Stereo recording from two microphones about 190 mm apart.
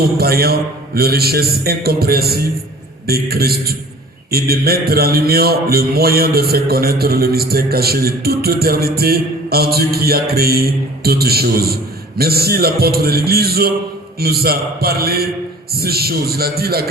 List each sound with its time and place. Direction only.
0.2 s mantra: 55° right (ahead or behind)
4.3 s a man's voice: 55° right (ahead or behind)
15.7 s mantra: 55° right (ahead or behind)